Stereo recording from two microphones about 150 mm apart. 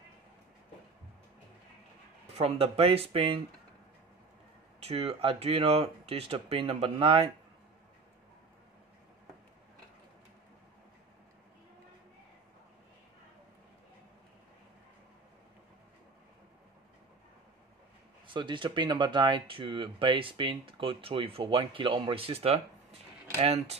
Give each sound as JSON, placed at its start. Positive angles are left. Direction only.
{"t": 2.3, "sound": "speech", "side_deg": -40}
{"t": 4.7, "sound": "speech", "side_deg": -40}
{"t": 18.2, "sound": "speech", "side_deg": -30}